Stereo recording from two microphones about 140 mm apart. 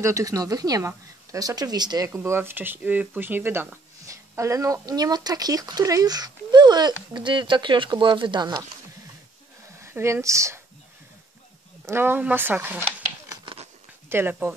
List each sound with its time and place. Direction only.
0.0 s speech: 25° right (ahead or behind)
2.1 s speech: 15° right (ahead or behind)
9.8 s speech: 20° right (ahead or behind)
11.8 s speech: 15° right (ahead or behind)
14.0 s speech: 15° right (ahead or behind)